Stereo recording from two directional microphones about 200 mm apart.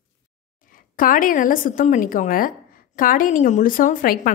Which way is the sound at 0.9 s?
45° left (ahead or behind).